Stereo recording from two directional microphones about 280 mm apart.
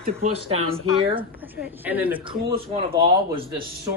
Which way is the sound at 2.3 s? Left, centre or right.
Centre.